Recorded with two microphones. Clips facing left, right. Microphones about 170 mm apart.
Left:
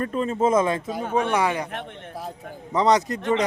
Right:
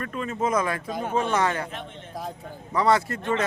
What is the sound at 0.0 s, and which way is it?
Speech, 30° left (ahead or behind).